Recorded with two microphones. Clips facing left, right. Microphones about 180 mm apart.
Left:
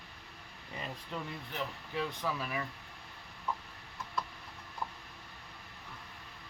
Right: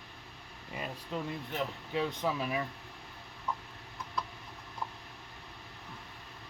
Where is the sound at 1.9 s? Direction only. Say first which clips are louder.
Right 4 dB; 20° right (ahead or behind).